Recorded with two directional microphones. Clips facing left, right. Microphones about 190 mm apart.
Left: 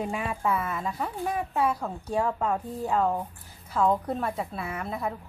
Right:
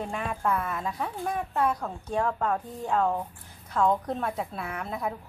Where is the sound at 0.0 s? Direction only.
5° left (ahead or behind).